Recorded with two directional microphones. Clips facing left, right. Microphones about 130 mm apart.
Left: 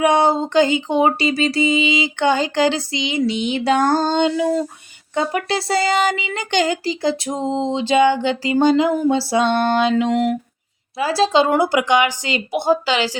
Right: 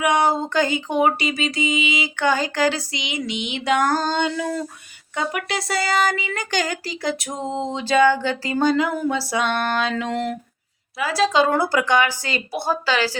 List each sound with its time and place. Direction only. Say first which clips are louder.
0.0 s a woman's voice: left 4 dB; 25° left (ahead or behind)
10.0 s speech: left 7 dB; 15° left (ahead or behind)
10.9 s a woman's voice: left 3 dB; 30° left (ahead or behind)